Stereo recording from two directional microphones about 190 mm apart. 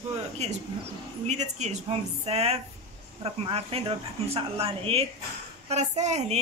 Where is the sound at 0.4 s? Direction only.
35° right (ahead or behind).